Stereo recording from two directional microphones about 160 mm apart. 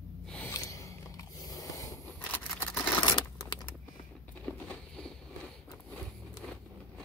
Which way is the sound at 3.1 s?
25° left (ahead or behind).